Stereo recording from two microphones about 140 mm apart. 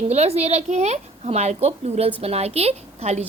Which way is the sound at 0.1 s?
50° right (ahead or behind).